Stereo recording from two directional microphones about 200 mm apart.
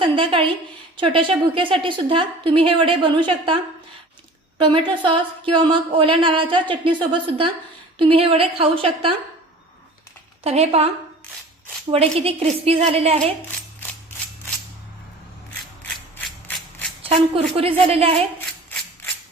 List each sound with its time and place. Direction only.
0.0 s a woman's voice: 25° right (ahead or behind)
10.4 s a woman's voice: 30° right (ahead or behind)
12.2 s a woman's voice: 30° right (ahead or behind)
15.8 s mechanisms: 5° left (ahead or behind)
17.0 s speech: 30° right (ahead or behind)